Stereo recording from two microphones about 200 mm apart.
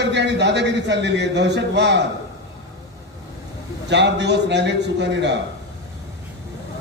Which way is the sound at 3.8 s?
60° right (ahead or behind).